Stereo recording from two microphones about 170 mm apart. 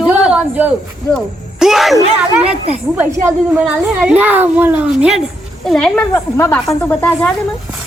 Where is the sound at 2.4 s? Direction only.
35° right (ahead or behind).